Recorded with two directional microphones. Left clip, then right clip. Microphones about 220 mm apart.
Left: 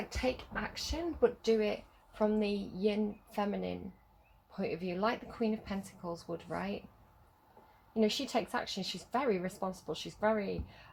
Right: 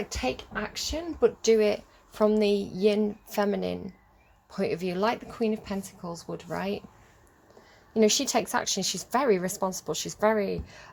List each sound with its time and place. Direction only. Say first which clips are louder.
0.2 s speech: right 3 dB; 40° right (ahead or behind)
7.9 s speech: right 9 dB; 40° right (ahead or behind)